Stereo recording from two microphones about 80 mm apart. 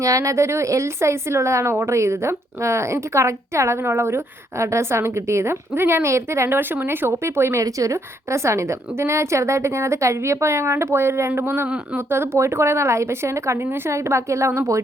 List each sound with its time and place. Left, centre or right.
0.0 s a woman's voice: right
7.6 s a woman's voice: right